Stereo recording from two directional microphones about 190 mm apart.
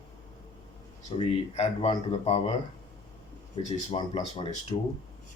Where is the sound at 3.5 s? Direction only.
25° left (ahead or behind).